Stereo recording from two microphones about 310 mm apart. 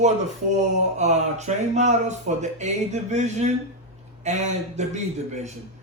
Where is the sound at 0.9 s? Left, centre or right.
Right.